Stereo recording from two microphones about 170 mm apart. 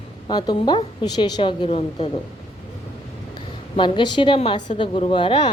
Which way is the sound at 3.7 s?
30° left (ahead or behind).